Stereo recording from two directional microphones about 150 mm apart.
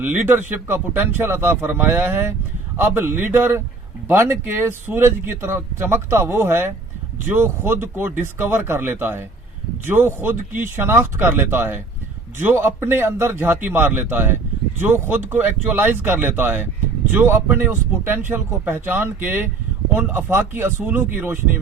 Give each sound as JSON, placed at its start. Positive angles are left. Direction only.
{"t": 0.0, "sound": "speech", "side_deg": -15}